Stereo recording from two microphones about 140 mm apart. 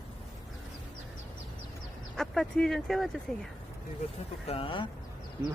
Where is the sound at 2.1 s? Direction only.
5° left (ahead or behind).